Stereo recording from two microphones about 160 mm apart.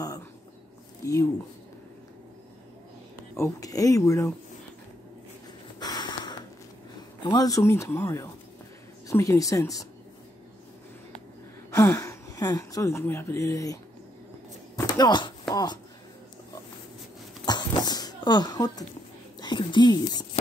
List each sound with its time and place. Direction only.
3.3 s speech: 20° left (ahead or behind)
5.8 s snort: 25° left (ahead or behind)
7.2 s speech: 20° left (ahead or behind)
11.7 s speech: 20° left (ahead or behind)
14.8 s chopping: 25° left (ahead or behind)
17.5 s a sound: 25° left (ahead or behind)
19.4 s speech: 30° left (ahead or behind)